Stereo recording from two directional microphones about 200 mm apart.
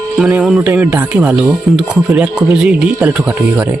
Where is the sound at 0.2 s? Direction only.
5° right (ahead or behind).